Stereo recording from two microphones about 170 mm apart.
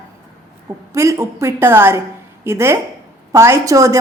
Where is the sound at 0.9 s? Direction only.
15° right (ahead or behind).